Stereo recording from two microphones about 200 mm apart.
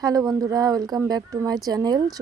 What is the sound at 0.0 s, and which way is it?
A woman's voice, 20° right (ahead or behind).